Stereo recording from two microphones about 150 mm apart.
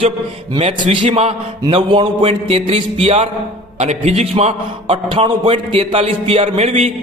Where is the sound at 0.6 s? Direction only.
40° right (ahead or behind).